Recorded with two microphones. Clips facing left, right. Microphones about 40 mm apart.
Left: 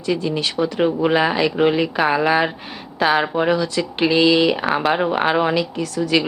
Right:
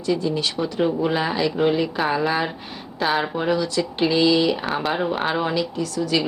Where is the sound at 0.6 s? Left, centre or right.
Left.